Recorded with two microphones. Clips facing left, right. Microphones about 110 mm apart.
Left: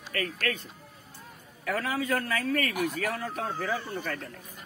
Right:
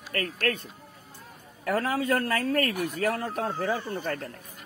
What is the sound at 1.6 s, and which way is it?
Speech, 45° right (ahead or behind).